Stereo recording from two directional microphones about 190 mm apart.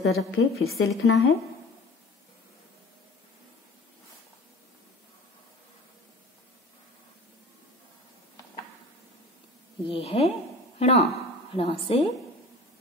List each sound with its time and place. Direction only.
0.0 s a woman's voice: 90° left
9.8 s a woman's voice: 30° left (ahead or behind)